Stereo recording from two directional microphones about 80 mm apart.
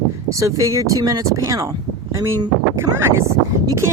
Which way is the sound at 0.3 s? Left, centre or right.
Right.